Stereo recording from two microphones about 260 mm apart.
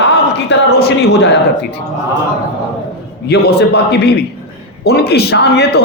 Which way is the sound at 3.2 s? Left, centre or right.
Left.